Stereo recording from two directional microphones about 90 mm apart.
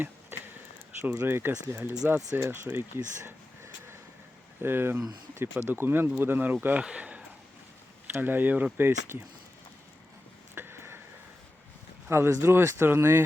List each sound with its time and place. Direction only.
1.0 s speech: 25° right (ahead or behind)
4.6 s speech: 25° right (ahead or behind)
6.8 s a sound: 10° right (ahead or behind)
8.1 s speech: 20° right (ahead or behind)
10.5 s a sound: 25° right (ahead or behind)
12.0 s speech: 25° right (ahead or behind)